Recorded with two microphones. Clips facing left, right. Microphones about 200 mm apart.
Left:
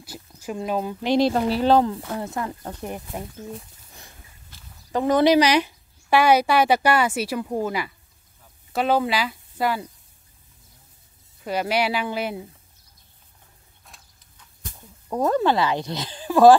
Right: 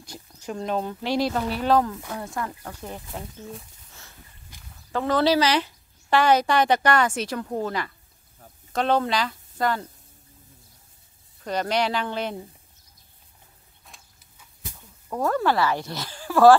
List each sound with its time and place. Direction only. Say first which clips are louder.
0.0 s speech: left 2 dB; 5° left (ahead or behind)
1.0 s speech: left 6 dB; 25° left (ahead or behind)
4.5 s walk: right 1 dB; 15° right (ahead or behind)
4.9 s speech: left 4 dB; 15° left (ahead or behind)
11.4 s speech: left 1 dB; 10° left (ahead or behind)
13.8 s a sound: even; centre (ahead or behind)
15.0 s speech: left 3 dB; 20° left (ahead or behind)